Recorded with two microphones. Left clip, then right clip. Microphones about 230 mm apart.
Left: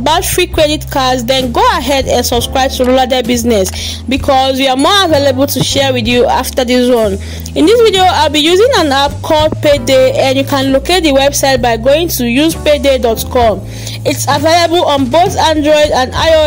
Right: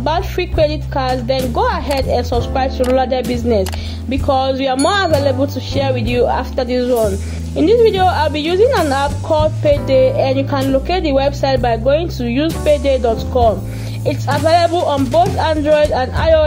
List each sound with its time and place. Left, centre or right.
0.0 s speech: left